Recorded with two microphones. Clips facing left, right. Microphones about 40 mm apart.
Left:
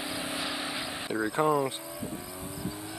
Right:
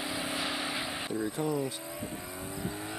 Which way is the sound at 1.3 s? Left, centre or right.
Left.